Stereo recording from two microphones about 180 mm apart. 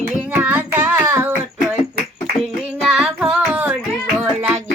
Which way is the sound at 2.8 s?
5° right (ahead or behind).